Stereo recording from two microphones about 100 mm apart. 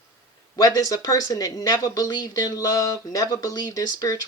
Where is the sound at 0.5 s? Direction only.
40° left (ahead or behind).